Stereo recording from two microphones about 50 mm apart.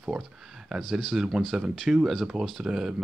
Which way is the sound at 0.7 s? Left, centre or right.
Centre.